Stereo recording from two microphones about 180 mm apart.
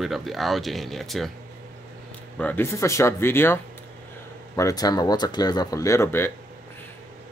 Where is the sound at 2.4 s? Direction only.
10° left (ahead or behind).